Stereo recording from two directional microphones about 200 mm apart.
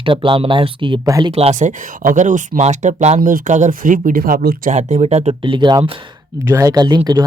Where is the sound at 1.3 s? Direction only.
30° right (ahead or behind).